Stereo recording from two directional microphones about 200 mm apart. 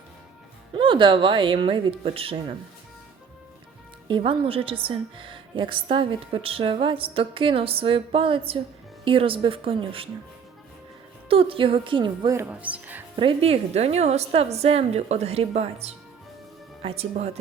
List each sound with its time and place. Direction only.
0.7 s speech: 25° right (ahead or behind)
4.1 s speech: 25° right (ahead or behind)
11.3 s speech: 25° right (ahead or behind); by 13.0 s 5° right (ahead or behind)
13.1 s a woman's voice: 30° right (ahead or behind)